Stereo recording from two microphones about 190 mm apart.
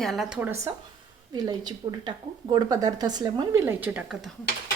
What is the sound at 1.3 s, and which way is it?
A woman's voice, 20° right (ahead or behind).